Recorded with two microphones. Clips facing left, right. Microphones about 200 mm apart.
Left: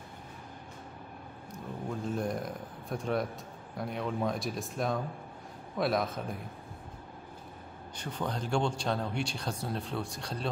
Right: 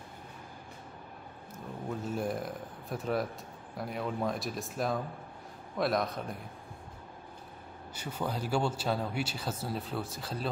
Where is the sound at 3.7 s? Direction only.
Centre (ahead or behind).